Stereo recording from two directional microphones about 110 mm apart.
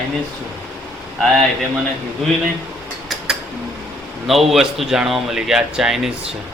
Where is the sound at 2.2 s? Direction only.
Centre (ahead or behind).